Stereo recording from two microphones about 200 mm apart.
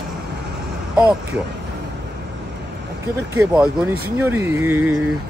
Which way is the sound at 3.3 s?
10° right (ahead or behind).